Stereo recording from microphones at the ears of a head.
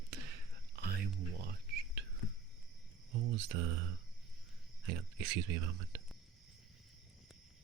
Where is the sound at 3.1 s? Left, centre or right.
Right.